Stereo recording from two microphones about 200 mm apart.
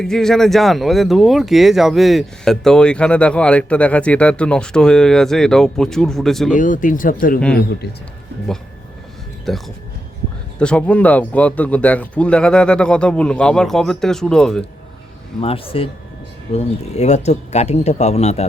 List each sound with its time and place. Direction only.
0.0 s speech: centre (ahead or behind)
6.5 s speech: 40° left (ahead or behind)
7.3 s speech: 5° left (ahead or behind)
9.5 s speech: centre (ahead or behind)
15.4 s a man's voice: 25° left (ahead or behind)